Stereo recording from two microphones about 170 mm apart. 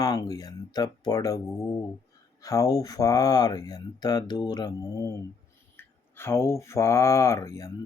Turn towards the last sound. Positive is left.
turn(degrees=20)  # may be behind; listen again after turning